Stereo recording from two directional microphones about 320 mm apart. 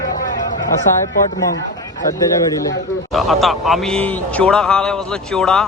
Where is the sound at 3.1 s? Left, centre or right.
Centre.